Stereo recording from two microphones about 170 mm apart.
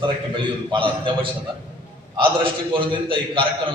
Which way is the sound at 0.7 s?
30° right (ahead or behind).